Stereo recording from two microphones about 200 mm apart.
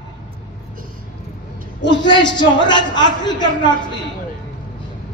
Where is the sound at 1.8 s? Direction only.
20° left (ahead or behind).